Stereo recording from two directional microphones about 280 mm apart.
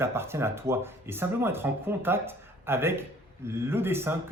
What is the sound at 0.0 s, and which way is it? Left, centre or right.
Speech, centre.